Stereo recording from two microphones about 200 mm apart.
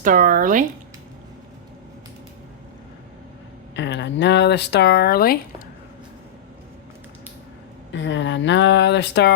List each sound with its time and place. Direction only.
0.0 s speech: 45° right (ahead or behind)
3.8 s speech: 60° left (ahead or behind)
7.9 s speech: 65° left (ahead or behind)